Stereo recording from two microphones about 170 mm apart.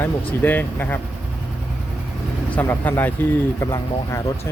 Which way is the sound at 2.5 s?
10° left (ahead or behind).